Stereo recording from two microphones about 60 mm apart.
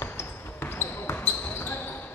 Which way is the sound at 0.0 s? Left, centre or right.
Left.